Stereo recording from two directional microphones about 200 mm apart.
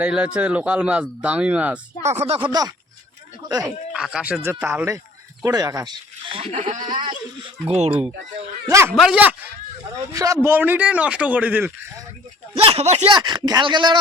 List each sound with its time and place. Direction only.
0.0 s speech: 5° right (ahead or behind)
2.0 s speech: 30° right (ahead or behind)
3.9 s speech: 5° right (ahead or behind); by 7.0 s 40° right (ahead or behind)
7.0 s speech: 25° right (ahead or behind)
8.7 s speech: 15° right (ahead or behind)
10.1 s speech: 15° right (ahead or behind)
12.6 s speech: 30° right (ahead or behind)